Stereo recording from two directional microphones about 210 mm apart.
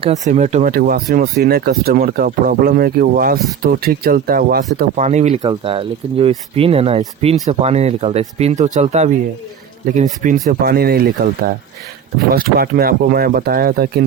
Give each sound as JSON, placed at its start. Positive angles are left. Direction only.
{"t": 0.0, "sound": "speech", "side_deg": -35}
{"t": 5.0, "sound": "speech", "side_deg": -35}
{"t": 12.3, "sound": "speech", "side_deg": -45}